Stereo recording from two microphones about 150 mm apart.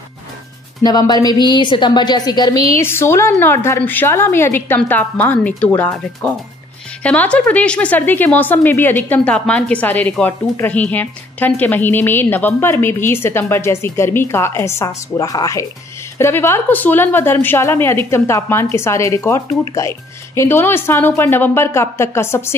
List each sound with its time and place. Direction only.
0.8 s a woman's voice: 25° left (ahead or behind)